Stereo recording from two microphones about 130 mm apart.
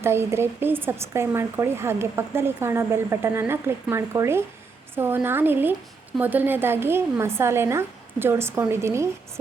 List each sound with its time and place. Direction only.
0.0 s a woman's voice: 20° right (ahead or behind)